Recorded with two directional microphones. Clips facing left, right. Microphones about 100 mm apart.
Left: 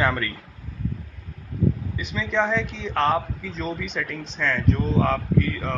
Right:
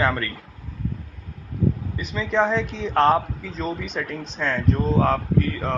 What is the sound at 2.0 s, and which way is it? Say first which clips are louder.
Speech: right 4 dB; 40° right (ahead or behind).